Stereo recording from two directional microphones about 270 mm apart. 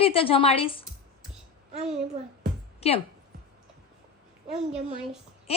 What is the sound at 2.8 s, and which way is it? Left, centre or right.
Speech, left.